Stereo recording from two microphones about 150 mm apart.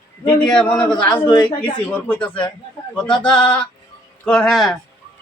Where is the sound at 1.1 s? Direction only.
25° left (ahead or behind).